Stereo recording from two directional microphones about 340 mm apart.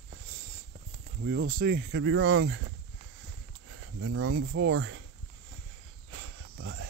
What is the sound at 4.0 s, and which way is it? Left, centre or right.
Speech, right.